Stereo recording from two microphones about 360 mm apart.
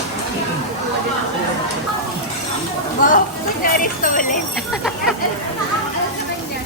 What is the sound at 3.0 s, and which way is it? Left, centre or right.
Speech, left.